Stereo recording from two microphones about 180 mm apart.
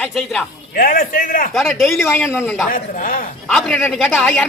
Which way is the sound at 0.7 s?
50° left (ahead or behind).